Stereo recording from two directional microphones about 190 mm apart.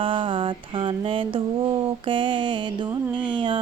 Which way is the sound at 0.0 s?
25° right (ahead or behind).